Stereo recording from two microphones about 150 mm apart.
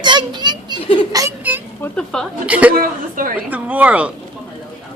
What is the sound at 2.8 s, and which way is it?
Speech, 65° right (ahead or behind).